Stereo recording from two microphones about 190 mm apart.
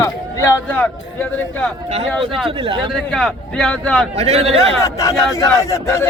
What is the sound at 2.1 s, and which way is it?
Speech, centre (ahead or behind).